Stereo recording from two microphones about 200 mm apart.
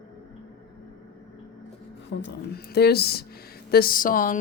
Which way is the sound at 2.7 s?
55° left (ahead or behind).